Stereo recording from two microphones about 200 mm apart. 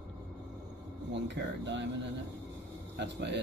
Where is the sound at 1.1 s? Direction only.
60° right (ahead or behind).